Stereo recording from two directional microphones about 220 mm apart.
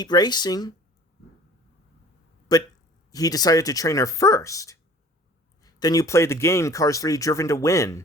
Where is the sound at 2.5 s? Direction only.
15° left (ahead or behind).